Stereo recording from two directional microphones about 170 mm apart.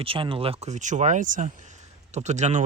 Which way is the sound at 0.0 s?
30° right (ahead or behind).